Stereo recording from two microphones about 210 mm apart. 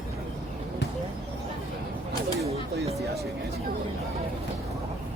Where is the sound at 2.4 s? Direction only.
30° right (ahead or behind).